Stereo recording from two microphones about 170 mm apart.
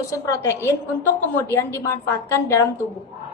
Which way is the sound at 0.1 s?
15° left (ahead or behind).